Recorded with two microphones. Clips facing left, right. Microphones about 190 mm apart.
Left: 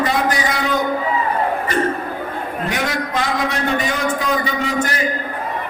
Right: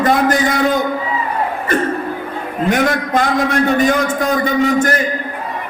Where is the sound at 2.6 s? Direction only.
50° right (ahead or behind).